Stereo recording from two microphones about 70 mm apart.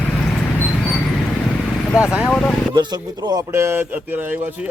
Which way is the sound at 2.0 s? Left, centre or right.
Centre.